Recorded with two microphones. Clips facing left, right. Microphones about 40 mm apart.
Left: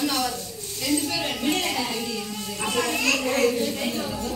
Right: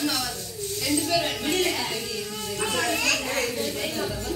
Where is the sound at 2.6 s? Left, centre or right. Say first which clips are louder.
Left 1 dB; left.